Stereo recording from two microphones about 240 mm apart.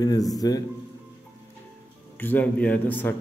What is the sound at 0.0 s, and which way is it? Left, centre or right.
Speech, centre.